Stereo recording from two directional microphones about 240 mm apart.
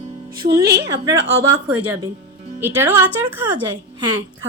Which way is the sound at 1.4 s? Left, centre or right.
Centre.